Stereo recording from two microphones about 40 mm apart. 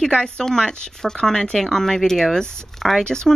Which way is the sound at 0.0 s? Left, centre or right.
Left.